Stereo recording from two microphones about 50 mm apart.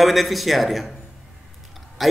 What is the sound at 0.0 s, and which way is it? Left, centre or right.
Speech, centre.